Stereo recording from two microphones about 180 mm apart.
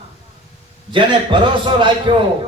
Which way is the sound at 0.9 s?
25° right (ahead or behind).